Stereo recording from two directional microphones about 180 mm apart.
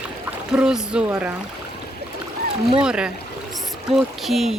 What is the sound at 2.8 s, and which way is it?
Speech, 5° right (ahead or behind).